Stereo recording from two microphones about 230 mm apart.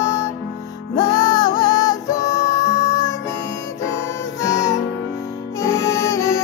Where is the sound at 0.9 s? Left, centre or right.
Centre.